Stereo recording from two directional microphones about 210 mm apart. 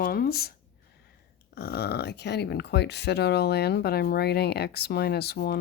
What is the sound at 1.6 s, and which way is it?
Speech, 50° left (ahead or behind).